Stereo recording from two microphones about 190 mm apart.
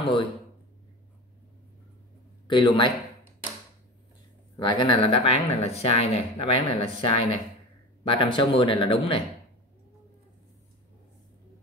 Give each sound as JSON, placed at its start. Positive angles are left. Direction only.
{"t": 0.0, "sound": "speech", "side_deg": 25}
{"t": 2.4, "sound": "a man's voice", "side_deg": 25}
{"t": 4.6, "sound": "speech", "side_deg": 25}